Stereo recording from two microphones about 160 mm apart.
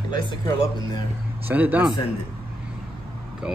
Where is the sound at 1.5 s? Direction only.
10° right (ahead or behind).